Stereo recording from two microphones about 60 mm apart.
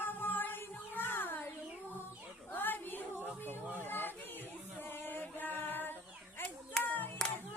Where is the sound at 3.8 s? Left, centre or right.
Left.